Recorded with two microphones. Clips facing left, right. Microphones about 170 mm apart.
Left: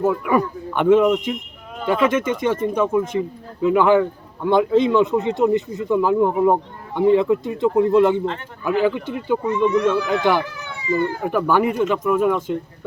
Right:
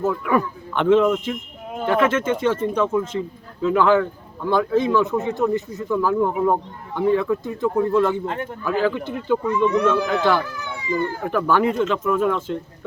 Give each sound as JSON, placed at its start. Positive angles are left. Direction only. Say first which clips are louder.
{"t": 0.0, "sound": "speech", "louder": "left 2 dB", "side_deg": 10}